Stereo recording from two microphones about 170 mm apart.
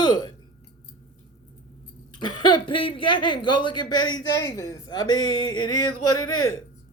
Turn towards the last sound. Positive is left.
turn(degrees=25)  # may be behind; listen again after turning